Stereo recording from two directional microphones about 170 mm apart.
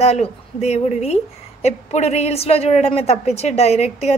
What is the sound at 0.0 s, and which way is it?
A woman's voice, 40° left (ahead or behind).